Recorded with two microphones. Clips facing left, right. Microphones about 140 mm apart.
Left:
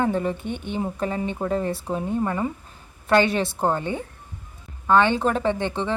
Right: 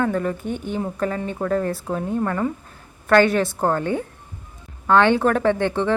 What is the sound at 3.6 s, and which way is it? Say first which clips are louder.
A woman's voice: right 3 dB; 15° left (ahead or behind).